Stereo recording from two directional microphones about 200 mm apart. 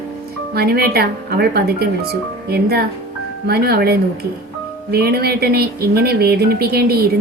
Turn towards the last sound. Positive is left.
turn(degrees=-50)  # may be behind; listen again after turning